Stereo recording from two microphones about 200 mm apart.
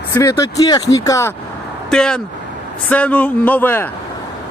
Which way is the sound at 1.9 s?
5° left (ahead or behind).